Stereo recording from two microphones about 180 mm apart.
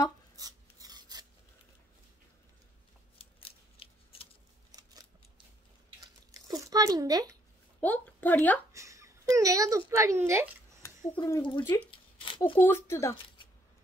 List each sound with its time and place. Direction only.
0.4 s filing: 20° right (ahead or behind)
3.2 s scissors: 30° left (ahead or behind)
6.4 s speech: 20° right (ahead or behind)
7.8 s a woman's voice: 10° left (ahead or behind)
8.7 s speech: 15° right (ahead or behind)
11.1 s speech: 20° left (ahead or behind)
12.2 s a sound: 30° left (ahead or behind)
12.5 s speech: 10° left (ahead or behind)